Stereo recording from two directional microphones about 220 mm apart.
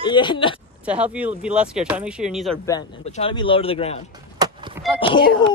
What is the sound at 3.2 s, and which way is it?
Speech, 25° left (ahead or behind).